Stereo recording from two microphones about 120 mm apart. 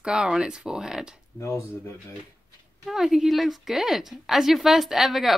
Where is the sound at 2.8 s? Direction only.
5° right (ahead or behind).